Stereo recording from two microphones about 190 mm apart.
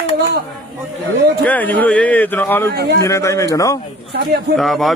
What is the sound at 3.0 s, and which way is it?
Speech, 15° left (ahead or behind).